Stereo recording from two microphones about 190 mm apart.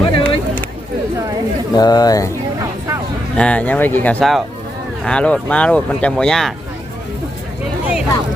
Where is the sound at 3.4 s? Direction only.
5° left (ahead or behind).